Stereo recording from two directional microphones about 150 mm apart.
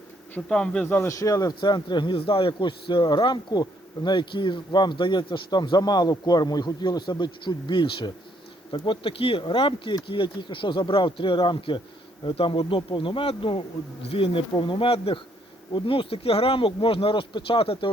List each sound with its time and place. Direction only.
0.3 s speech: 5° left (ahead or behind); by 17.9 s 35° left (ahead or behind)